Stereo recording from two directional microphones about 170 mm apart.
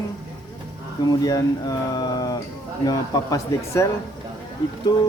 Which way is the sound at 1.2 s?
20° left (ahead or behind).